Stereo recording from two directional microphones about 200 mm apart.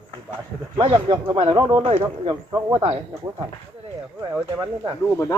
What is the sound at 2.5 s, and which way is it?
Speech, 15° right (ahead or behind).